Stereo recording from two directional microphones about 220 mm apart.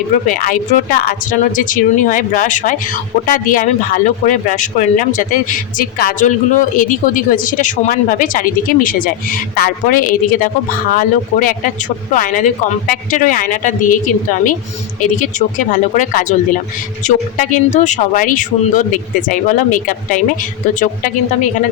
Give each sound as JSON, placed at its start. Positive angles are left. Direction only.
{"t": 0.3, "sound": "speech", "side_deg": 35}